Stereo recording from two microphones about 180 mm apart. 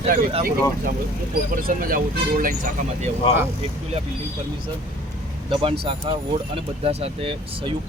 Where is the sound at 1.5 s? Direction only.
50° right (ahead or behind).